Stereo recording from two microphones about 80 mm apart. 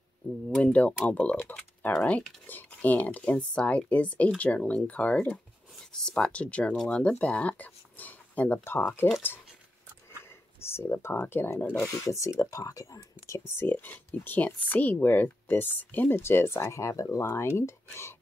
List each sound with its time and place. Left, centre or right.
0.6 s speech: centre
10.6 s speech: left
12.0 s speech: left
13.5 s speech: left